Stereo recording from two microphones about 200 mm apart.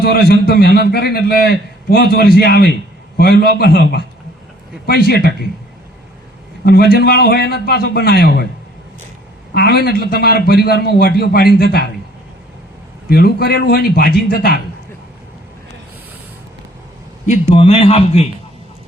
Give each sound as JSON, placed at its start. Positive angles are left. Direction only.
{"t": 0.0, "sound": "a man's voice", "side_deg": 50}
{"t": 6.7, "sound": "a man's voice", "side_deg": 50}
{"t": 9.6, "sound": "a man's voice", "side_deg": 50}
{"t": 13.1, "sound": "a man's voice", "side_deg": 50}
{"t": 17.2, "sound": "a man's voice", "side_deg": 30}